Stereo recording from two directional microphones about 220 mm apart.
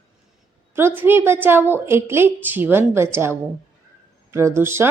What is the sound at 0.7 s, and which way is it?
Speech, 10° right (ahead or behind).